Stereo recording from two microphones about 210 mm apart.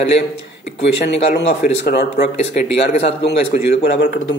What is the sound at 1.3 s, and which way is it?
A man's voice, 50° left (ahead or behind).